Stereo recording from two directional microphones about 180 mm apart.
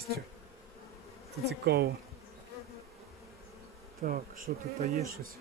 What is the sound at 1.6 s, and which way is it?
Speech, 65° right (ahead or behind).